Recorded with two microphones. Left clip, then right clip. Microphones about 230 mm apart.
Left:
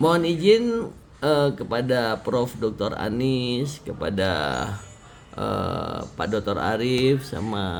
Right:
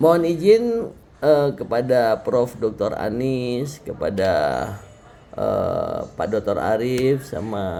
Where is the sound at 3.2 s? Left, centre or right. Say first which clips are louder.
Left 2 dB; centre.